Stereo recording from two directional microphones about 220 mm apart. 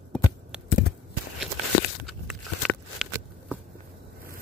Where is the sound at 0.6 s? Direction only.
45° left (ahead or behind).